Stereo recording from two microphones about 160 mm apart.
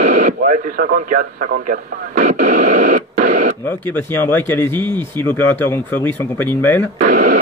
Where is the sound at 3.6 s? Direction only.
10° left (ahead or behind).